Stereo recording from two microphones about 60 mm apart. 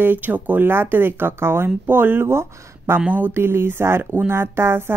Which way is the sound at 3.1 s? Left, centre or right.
Right.